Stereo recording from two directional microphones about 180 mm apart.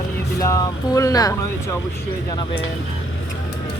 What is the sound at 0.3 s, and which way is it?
Speech, 20° left (ahead or behind).